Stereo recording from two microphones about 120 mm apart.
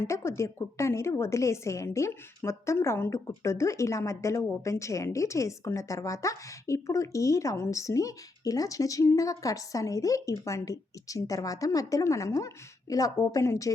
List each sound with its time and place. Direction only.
0.0 s a woman's voice: 20° left (ahead or behind)